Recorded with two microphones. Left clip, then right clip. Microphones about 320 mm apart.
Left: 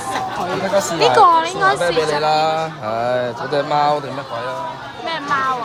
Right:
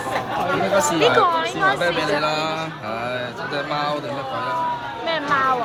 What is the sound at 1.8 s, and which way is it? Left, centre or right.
Speech, left.